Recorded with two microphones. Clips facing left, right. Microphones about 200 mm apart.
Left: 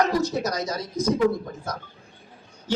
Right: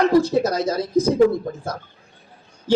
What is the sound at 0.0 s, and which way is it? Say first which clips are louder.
A man's voice: right 6 dB; 30° right (ahead or behind).